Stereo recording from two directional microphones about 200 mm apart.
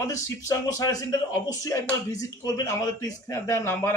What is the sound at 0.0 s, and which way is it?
Speech, 15° left (ahead or behind).